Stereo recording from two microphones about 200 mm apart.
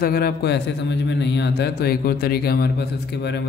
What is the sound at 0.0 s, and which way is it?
Speech, 50° left (ahead or behind).